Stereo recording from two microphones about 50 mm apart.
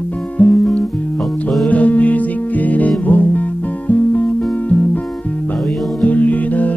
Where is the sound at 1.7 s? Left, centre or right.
Left.